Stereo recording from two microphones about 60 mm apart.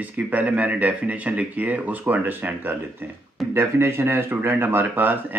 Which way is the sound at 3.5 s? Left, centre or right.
Right.